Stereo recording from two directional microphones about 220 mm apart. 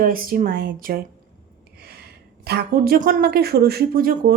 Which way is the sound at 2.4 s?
45° right (ahead or behind).